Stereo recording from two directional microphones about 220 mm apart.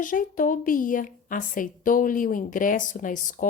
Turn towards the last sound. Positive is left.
turn(degrees=35)  # may be behind; listen again after turning